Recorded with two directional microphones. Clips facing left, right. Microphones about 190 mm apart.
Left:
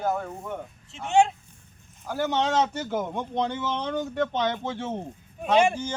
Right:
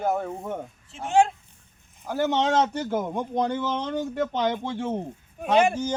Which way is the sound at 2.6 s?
Centre (ahead or behind).